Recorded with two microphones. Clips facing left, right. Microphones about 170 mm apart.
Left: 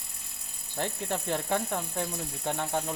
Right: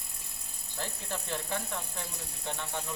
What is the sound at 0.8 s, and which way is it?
Speech, 55° left (ahead or behind).